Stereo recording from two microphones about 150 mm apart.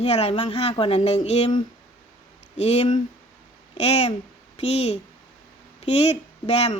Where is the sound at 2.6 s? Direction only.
45° left (ahead or behind).